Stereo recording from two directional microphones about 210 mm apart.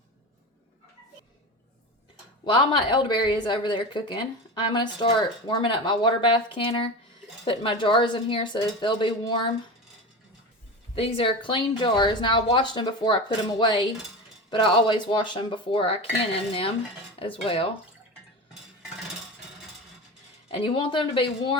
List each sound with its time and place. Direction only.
2.4 s speech: 20° left (ahead or behind)
10.9 s speech: 25° left (ahead or behind)
17.2 s speech: 25° left (ahead or behind)
20.5 s speech: 25° left (ahead or behind)